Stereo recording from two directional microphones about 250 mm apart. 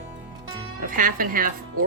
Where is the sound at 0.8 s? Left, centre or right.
Right.